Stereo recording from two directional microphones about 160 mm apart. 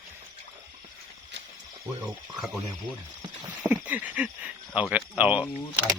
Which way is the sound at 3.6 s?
10° right (ahead or behind).